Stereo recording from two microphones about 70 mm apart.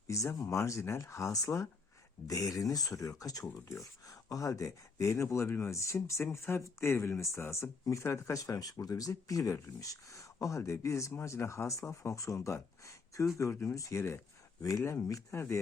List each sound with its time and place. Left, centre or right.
0.1 s speech: left
14.6 s speech: left
15.3 s speech: left